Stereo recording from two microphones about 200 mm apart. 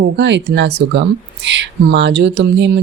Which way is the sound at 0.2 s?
60° right (ahead or behind).